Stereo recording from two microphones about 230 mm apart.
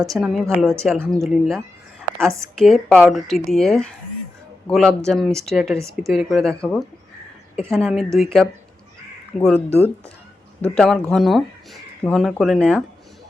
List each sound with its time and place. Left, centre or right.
0.1 s speech: centre
5.7 s a woman's voice: centre
6.1 s speech: centre
9.3 s speech: left
10.6 s speech: centre